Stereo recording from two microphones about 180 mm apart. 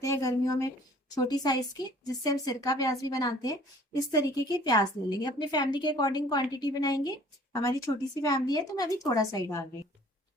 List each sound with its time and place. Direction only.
0.0 s a woman's voice: 20° left (ahead or behind)